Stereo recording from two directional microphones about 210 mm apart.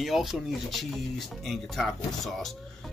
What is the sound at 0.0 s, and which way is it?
Speech, centre (ahead or behind).